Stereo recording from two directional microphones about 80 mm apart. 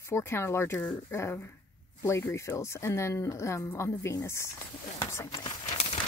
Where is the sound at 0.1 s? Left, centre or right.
Left.